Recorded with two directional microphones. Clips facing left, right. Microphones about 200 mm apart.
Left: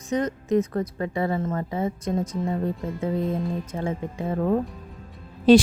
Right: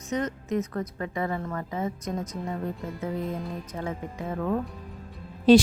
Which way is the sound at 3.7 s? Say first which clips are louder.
Left 4 dB; 25° left (ahead or behind).